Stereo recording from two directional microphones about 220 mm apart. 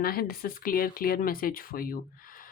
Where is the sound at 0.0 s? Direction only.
45° left (ahead or behind).